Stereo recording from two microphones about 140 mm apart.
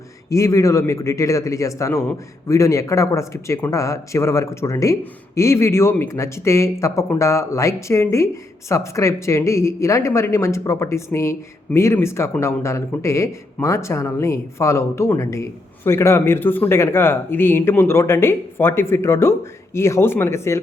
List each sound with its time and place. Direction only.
0.3 s speech: 20° left (ahead or behind)